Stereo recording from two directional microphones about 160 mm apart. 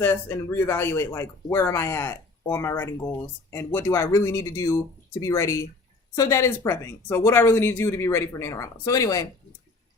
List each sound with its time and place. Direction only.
0.0 s speech: 15° left (ahead or behind)